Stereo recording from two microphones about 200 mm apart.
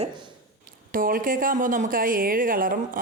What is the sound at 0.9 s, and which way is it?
A woman's voice, 45° right (ahead or behind).